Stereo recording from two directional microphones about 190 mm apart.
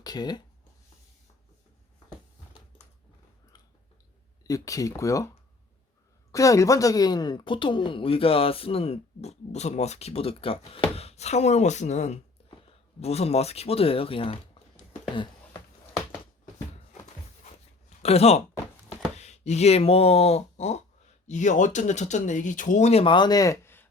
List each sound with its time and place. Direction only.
0.0 s speech: 20° left (ahead or behind)
4.4 s speech: 15° left (ahead or behind)
18.0 s speech: 35° left (ahead or behind); by 23.9 s 10° left (ahead or behind)